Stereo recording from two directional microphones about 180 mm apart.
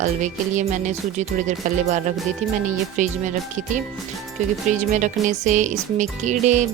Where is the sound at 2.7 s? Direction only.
45° right (ahead or behind).